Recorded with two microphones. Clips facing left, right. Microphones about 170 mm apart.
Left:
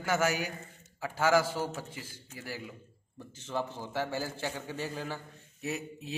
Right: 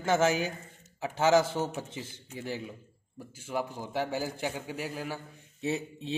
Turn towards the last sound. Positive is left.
turn(degrees=-30)  # may be behind; listen again after turning